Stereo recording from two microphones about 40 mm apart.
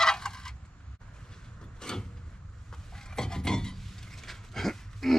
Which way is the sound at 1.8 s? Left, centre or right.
Centre.